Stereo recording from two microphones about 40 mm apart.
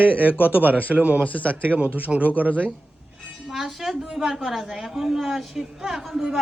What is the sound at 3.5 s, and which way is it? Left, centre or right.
A woman's voice, centre.